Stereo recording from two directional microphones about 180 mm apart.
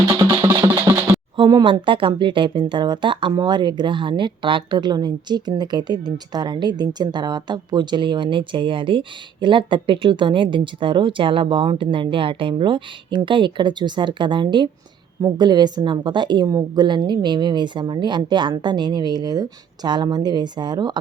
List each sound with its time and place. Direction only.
0.1 s music: 20° right (ahead or behind)
1.4 s speech: 25° right (ahead or behind)